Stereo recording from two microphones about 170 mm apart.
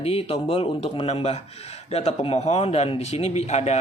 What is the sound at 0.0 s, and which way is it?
A man's voice, 35° left (ahead or behind).